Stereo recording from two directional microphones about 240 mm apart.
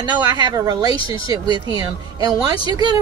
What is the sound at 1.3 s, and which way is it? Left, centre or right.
A woman's voice, centre.